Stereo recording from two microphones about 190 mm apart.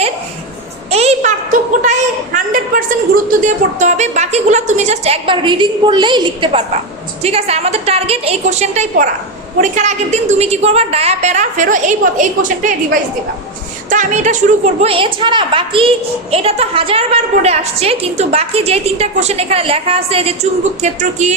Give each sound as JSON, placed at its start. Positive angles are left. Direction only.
{"t": 0.9, "sound": "a woman's voice", "side_deg": -35}